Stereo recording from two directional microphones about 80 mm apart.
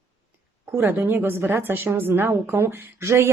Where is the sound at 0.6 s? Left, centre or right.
Right.